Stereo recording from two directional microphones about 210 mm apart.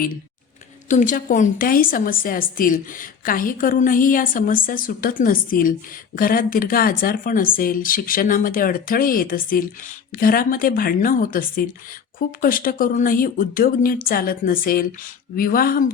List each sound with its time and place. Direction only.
0.9 s a woman's voice: 35° left (ahead or behind)